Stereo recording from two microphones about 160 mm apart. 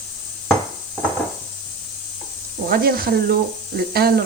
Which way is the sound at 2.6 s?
70° right (ahead or behind).